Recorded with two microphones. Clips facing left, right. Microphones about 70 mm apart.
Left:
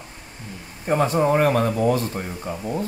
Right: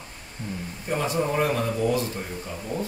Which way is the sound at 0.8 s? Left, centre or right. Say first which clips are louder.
Left 7 dB; left.